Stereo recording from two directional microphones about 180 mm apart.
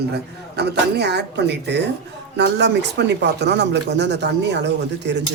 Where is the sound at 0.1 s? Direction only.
65° right (ahead or behind).